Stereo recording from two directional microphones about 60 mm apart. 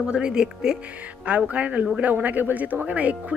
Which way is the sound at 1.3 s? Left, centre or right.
Right.